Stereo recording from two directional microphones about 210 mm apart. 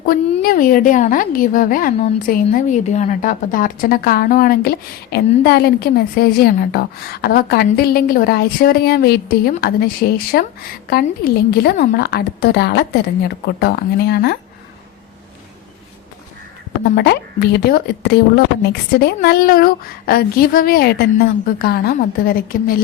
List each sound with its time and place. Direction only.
0.0 s a woman's voice: 45° left (ahead or behind)
17.0 s a woman's voice: 45° left (ahead or behind)